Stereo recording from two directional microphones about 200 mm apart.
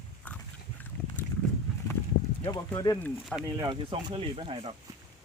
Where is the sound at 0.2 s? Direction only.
10° left (ahead or behind).